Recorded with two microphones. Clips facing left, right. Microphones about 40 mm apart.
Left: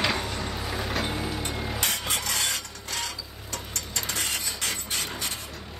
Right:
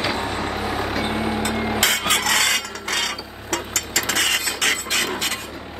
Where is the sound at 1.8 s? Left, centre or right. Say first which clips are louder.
Right 10 dB; right.